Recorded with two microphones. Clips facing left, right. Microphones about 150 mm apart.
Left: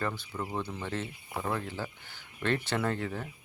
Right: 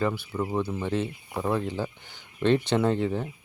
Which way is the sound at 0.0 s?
10° right (ahead or behind).